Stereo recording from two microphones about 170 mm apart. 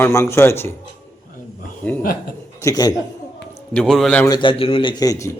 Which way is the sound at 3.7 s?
5° left (ahead or behind).